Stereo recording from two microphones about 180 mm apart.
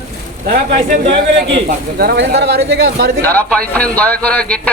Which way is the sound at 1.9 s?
60° right (ahead or behind).